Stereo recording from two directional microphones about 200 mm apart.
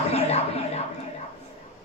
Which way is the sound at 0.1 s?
30° left (ahead or behind).